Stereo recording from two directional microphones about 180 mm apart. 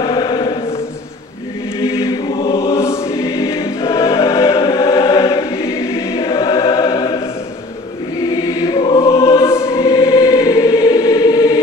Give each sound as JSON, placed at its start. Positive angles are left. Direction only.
{"t": 0.0, "sound": "chant", "side_deg": 25}
{"t": 1.8, "sound": "choir", "side_deg": 25}
{"t": 2.7, "sound": "choir", "side_deg": 15}
{"t": 8.5, "sound": "choir", "side_deg": 20}